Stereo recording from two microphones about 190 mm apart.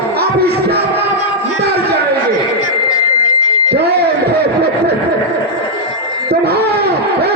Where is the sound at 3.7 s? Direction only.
55° right (ahead or behind).